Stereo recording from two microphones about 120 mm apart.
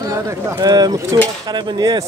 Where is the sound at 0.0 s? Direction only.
25° right (ahead or behind).